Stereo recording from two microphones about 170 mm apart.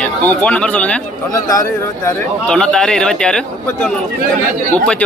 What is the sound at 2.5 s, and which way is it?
A man's voice, 5° left (ahead or behind).